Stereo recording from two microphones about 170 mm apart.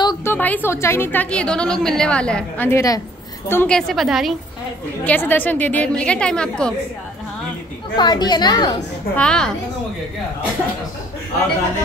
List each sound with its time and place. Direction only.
0.0 s a woman's voice: 20° left (ahead or behind); by 4.4 s centre (ahead or behind)
5.0 s a woman's voice: 10° left (ahead or behind)
7.9 s a woman's voice: 25° left (ahead or behind)
9.1 s a woman's voice: 5° left (ahead or behind)